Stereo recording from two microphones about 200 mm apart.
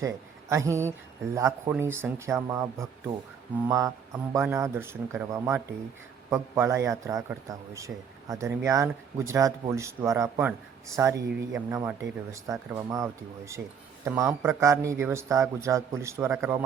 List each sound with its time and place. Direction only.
0.0 s a man's voice: 15° right (ahead or behind)